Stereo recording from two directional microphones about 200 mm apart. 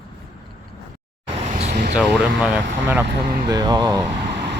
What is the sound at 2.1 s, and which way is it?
Speech, 5° right (ahead or behind).